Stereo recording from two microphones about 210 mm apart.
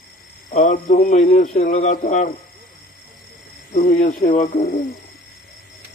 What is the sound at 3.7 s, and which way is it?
Speech, 40° left (ahead or behind).